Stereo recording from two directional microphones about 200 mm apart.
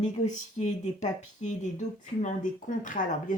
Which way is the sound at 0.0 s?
35° left (ahead or behind).